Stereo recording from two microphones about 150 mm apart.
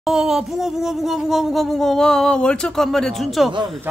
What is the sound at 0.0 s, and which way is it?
Speech, 5° right (ahead or behind).